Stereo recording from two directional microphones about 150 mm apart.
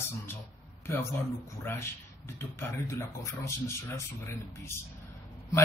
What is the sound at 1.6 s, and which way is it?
Speech, 15° left (ahead or behind).